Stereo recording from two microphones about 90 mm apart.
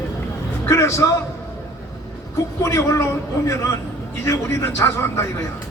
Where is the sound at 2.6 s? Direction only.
30° left (ahead or behind).